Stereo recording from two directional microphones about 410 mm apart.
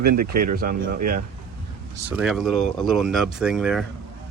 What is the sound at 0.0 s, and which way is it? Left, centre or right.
Speech, right.